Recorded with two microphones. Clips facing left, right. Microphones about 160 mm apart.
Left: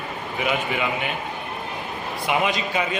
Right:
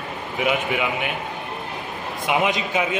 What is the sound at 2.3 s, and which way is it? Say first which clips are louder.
Speech: right 2 dB; 15° right (ahead or behind).